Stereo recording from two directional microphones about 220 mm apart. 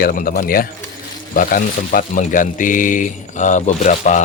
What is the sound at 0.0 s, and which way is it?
Speech, 40° left (ahead or behind).